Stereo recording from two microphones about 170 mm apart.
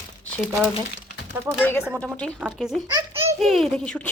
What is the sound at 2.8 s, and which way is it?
Speech, 20° right (ahead or behind).